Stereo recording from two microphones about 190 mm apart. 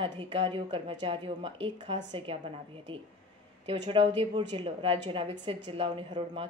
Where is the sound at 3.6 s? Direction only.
25° right (ahead or behind).